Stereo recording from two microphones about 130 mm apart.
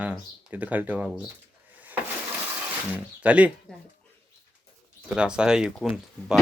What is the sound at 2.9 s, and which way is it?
Speech, 10° right (ahead or behind).